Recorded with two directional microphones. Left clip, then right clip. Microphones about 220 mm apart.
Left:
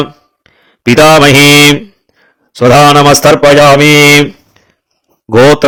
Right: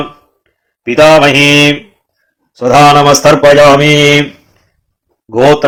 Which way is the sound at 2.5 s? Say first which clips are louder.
Left 1 dB; 40° left (ahead or behind).